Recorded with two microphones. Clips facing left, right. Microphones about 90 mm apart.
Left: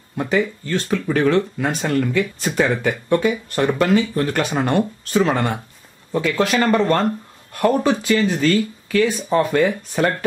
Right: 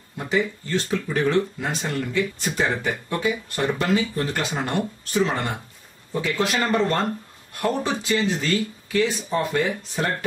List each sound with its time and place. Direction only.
0.2 s speech: 60° left (ahead or behind)
1.7 s speech: 55° left (ahead or behind)
6.1 s speech: 55° left (ahead or behind)